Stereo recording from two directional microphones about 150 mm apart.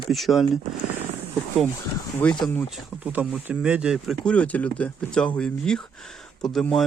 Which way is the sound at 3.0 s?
5° right (ahead or behind).